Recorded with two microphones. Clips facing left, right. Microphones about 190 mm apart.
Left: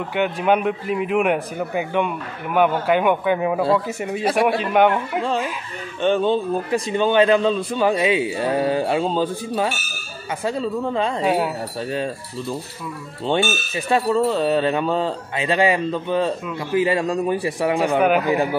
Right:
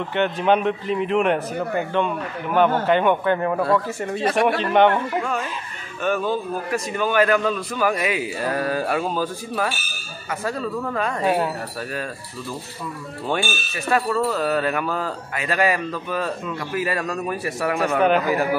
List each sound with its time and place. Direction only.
0.1 s a man's voice: 10° left (ahead or behind)
6.0 s a man's voice: 25° left (ahead or behind)
11.2 s a man's voice: 5° left (ahead or behind)
11.9 s a man's voice: 25° left (ahead or behind)
17.7 s a man's voice: 15° left (ahead or behind)
18.2 s a man's voice: 25° left (ahead or behind)